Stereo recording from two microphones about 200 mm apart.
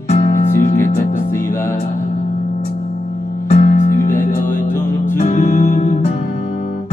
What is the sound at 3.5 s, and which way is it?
Music, 35° left (ahead or behind).